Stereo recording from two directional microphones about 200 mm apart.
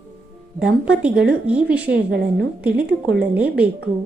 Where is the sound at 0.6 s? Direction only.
5° right (ahead or behind).